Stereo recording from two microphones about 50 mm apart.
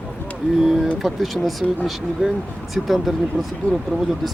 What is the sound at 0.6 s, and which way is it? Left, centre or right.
Speech, centre.